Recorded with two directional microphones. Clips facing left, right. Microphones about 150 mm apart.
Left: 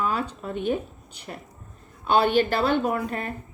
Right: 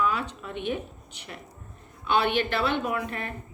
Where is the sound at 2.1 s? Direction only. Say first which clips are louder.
Left 4 dB; 40° left (ahead or behind).